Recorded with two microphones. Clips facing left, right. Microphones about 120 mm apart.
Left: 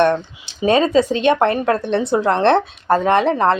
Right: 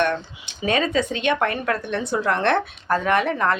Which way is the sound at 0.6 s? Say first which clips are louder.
Left 7 dB; 30° left (ahead or behind).